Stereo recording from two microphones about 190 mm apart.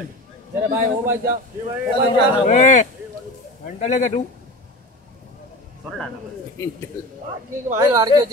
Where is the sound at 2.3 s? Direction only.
35° left (ahead or behind).